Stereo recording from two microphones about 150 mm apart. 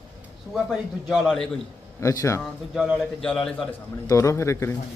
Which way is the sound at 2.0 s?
20° left (ahead or behind).